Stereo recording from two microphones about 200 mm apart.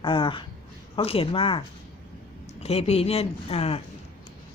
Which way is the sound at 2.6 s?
30° left (ahead or behind).